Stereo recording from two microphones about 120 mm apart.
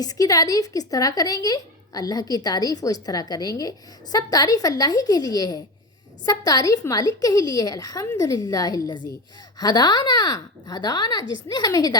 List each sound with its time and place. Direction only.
0.0 s speech: 30° left (ahead or behind)